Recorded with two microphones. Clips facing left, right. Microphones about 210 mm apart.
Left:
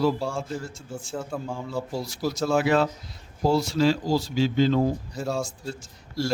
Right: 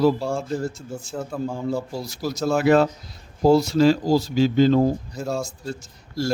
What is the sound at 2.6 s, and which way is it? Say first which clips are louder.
Speech: right 5 dB; 45° right (ahead or behind).